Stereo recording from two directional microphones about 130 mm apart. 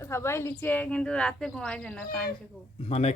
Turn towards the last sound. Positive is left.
turn(degrees=55)  # may be behind; listen again after turning